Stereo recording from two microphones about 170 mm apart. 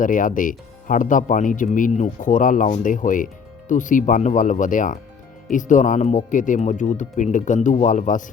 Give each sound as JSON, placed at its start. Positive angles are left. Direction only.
{"t": 0.0, "sound": "speech", "side_deg": 50}